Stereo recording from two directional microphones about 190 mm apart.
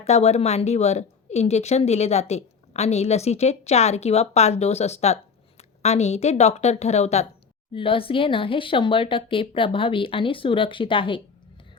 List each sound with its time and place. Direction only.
0.0 s speech: 35° left (ahead or behind)